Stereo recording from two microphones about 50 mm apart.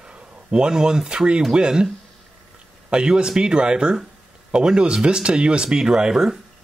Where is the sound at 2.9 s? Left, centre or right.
Centre.